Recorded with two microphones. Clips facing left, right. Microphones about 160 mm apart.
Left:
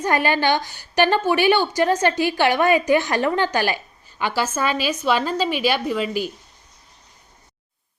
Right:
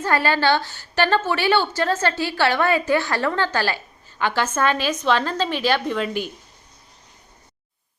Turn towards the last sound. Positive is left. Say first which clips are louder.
# even
turn(degrees=5)  # may be behind; listen again after turning